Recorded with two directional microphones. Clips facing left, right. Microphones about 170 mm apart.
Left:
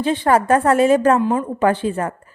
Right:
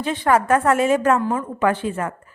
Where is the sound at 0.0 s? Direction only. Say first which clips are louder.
Left 2 dB; 30° left (ahead or behind).